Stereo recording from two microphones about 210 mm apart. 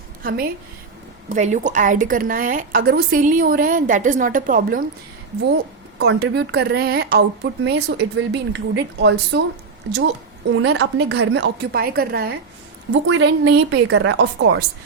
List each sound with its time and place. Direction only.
0.2 s a woman's voice: 45° right (ahead or behind)
6.0 s a woman's voice: 55° right (ahead or behind)
12.9 s a woman's voice: 60° right (ahead or behind)